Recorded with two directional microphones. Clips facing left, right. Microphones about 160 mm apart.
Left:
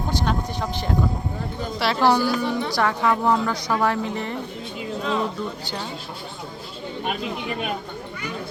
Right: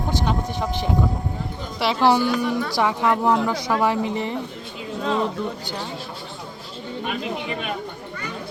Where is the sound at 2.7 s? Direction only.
5° right (ahead or behind).